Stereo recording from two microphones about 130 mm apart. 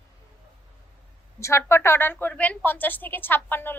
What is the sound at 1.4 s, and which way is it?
A woman's voice, 20° left (ahead or behind).